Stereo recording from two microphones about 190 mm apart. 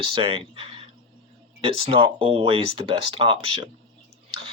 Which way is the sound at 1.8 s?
30° right (ahead or behind).